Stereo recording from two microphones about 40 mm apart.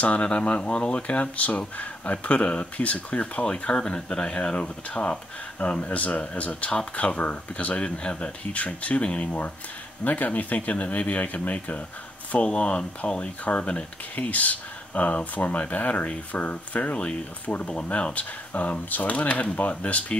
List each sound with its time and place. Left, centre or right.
0.0 s speech: left